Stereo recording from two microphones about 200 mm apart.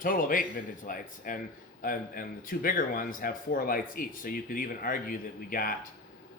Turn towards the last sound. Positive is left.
turn(degrees=45)  # may be behind; listen again after turning